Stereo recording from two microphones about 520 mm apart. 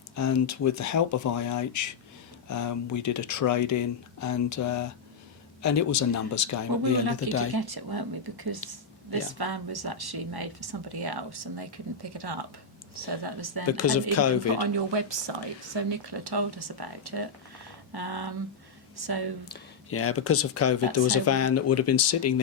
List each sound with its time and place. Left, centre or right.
0.2 s speech: left
7.5 s speech: right
13.7 s speech: left
14.6 s speech: right
19.5 s speech: left